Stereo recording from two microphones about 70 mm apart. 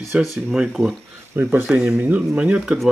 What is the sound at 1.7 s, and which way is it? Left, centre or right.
Speech, centre.